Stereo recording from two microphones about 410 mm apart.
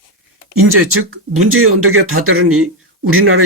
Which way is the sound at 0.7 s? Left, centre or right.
Right.